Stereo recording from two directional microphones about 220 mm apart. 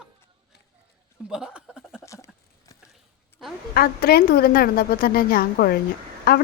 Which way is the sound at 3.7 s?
45° left (ahead or behind).